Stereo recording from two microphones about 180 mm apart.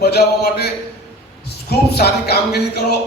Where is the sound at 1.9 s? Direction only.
60° left (ahead or behind).